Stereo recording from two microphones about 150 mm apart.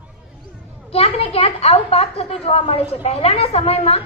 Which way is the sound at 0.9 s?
40° left (ahead or behind).